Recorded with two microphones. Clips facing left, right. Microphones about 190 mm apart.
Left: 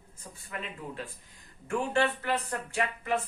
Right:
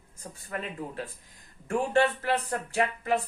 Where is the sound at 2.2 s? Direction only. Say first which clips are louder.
Right 3 dB; 40° right (ahead or behind).